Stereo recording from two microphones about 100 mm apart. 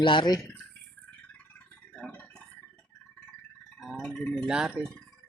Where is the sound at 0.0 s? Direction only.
50° left (ahead or behind).